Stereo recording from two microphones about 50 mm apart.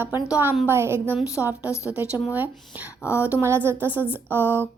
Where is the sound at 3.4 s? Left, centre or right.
Right.